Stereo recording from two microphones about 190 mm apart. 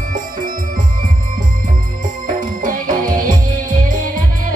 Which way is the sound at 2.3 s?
45° right (ahead or behind).